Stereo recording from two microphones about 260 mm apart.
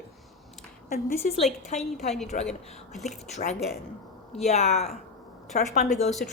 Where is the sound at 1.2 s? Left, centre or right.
Left.